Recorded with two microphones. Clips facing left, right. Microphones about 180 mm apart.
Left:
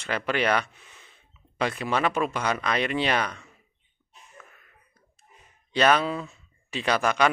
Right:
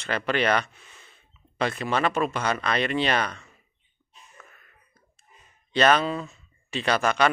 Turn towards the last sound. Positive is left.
turn(degrees=10)  # may be behind; listen again after turning